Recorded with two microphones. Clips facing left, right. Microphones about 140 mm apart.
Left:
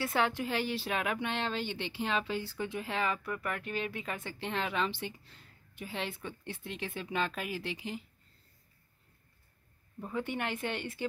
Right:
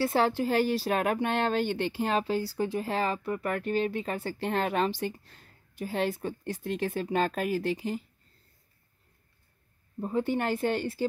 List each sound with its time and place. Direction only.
0.0 s speech: 30° right (ahead or behind)
9.9 s speech: 35° right (ahead or behind)